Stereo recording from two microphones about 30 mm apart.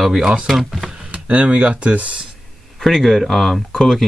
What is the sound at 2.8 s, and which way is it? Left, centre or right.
Speech, centre.